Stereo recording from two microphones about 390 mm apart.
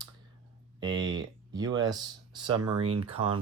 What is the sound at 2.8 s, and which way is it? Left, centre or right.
Speech, right.